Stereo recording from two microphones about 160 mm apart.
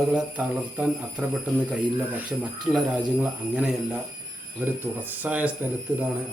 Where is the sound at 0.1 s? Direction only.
5° right (ahead or behind).